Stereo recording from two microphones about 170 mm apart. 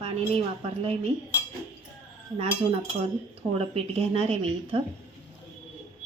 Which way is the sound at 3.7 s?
35° right (ahead or behind).